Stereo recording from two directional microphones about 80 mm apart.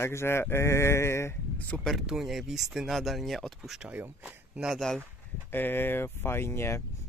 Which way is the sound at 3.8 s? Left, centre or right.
Centre.